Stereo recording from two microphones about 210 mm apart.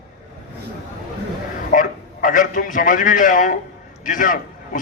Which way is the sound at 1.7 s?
40° left (ahead or behind).